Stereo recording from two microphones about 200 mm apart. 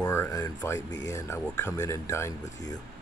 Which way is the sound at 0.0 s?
15° left (ahead or behind).